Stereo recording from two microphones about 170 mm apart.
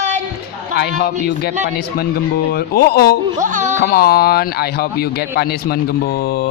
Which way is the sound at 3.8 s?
60° left (ahead or behind).